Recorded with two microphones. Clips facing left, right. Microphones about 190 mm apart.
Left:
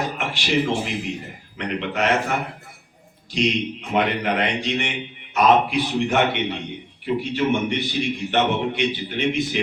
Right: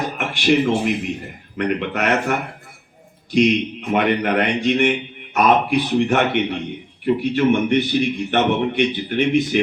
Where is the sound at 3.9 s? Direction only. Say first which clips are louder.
Right 4 dB; 50° right (ahead or behind).